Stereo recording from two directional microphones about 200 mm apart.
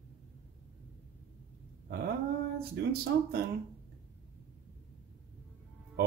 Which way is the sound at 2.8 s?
55° right (ahead or behind).